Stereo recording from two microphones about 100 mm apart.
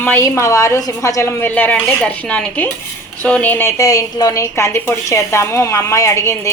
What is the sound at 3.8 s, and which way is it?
A woman's voice, 35° left (ahead or behind).